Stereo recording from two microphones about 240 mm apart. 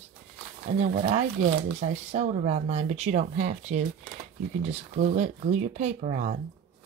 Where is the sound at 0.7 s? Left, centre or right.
Right.